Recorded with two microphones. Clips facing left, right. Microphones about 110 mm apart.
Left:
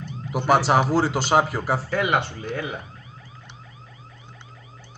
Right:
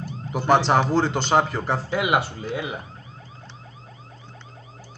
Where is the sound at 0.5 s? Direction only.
5° left (ahead or behind).